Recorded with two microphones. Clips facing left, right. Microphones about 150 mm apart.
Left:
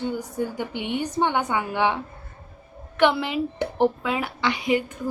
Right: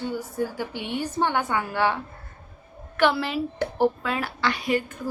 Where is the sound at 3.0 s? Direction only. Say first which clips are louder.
Left 2 dB; 20° left (ahead or behind).